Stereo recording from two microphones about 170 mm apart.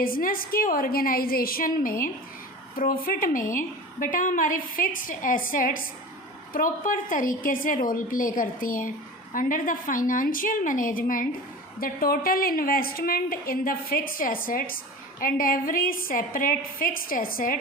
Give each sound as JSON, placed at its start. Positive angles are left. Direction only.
{"t": 0.0, "sound": "a woman's voice", "side_deg": 55}